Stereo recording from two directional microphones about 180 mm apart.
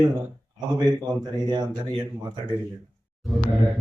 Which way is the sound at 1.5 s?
25° right (ahead or behind).